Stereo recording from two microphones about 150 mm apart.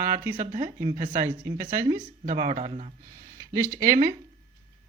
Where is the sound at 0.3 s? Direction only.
60° right (ahead or behind).